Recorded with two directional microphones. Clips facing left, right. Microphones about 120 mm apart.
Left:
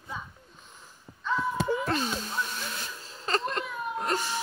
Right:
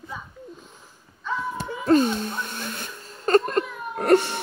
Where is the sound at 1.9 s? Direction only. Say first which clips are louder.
Right 11 dB; 50° right (ahead or behind).